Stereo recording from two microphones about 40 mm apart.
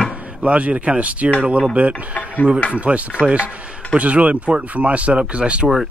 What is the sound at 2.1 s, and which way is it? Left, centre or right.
Speech, left.